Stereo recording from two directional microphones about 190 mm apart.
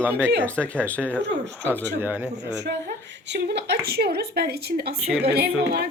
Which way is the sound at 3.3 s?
60° right (ahead or behind).